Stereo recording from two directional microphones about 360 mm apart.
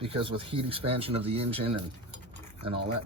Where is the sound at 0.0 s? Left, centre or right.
Centre.